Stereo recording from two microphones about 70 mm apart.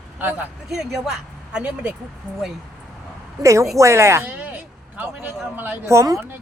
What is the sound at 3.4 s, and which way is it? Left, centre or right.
Speech, right.